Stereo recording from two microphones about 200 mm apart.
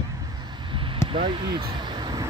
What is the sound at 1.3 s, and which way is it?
Speech, 25° right (ahead or behind).